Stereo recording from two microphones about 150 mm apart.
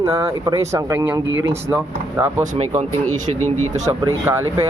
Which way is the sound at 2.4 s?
50° right (ahead or behind).